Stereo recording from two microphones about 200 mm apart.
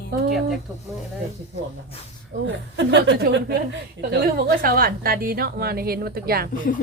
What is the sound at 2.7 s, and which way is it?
A woman's voice, 60° right (ahead or behind).